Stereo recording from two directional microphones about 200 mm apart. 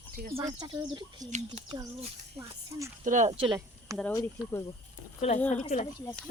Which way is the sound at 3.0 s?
40° right (ahead or behind).